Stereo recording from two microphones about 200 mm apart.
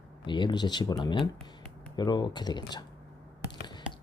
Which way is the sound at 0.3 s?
25° left (ahead or behind).